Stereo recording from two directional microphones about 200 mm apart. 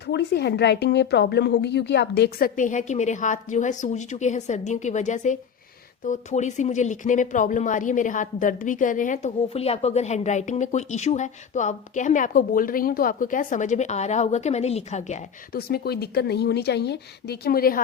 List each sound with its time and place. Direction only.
0.1 s speech: 55° left (ahead or behind)
2.6 s speech: 40° left (ahead or behind)
15.5 s speech: 50° left (ahead or behind)